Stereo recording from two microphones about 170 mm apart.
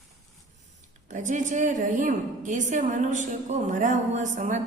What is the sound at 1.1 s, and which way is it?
A woman's voice, 45° right (ahead or behind).